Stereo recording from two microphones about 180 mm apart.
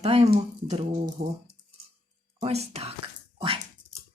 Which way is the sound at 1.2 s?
50° right (ahead or behind).